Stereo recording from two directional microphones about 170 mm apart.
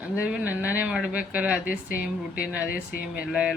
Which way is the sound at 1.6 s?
60° left (ahead or behind).